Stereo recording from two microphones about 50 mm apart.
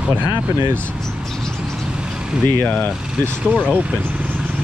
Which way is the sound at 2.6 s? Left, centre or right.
Left.